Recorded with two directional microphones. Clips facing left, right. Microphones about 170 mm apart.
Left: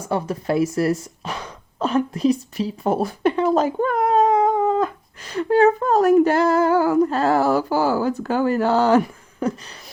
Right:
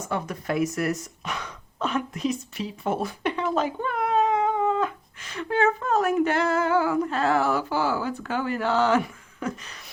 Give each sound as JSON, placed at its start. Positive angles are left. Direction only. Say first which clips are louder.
{"t": 0.0, "sound": "speech", "louder": "left 6 dB", "side_deg": 30}